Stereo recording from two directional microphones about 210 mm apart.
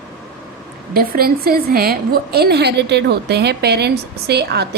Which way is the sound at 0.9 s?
45° right (ahead or behind).